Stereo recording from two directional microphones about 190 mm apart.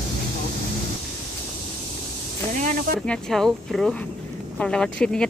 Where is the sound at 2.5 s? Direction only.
40° right (ahead or behind).